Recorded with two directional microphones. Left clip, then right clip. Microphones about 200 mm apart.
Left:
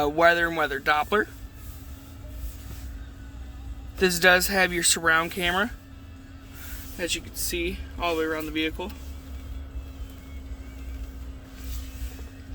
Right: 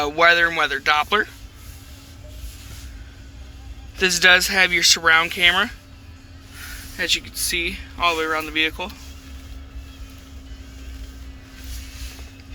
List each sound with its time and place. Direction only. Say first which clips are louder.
0.0 s speech: right 5 dB; 30° left (ahead or behind)
3.9 s speech: right 5 dB; 30° left (ahead or behind)
6.9 s speech: right 8 dB; 10° left (ahead or behind)